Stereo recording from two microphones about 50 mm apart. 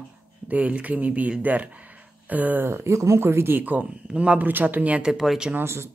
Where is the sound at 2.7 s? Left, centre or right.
Right.